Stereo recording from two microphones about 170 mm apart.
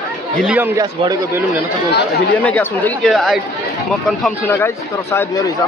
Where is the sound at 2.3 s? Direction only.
10° left (ahead or behind).